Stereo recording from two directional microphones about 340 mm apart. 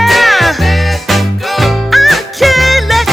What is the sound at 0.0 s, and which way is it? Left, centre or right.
Music, centre.